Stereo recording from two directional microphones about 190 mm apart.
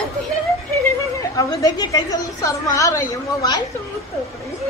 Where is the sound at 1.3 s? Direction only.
20° left (ahead or behind).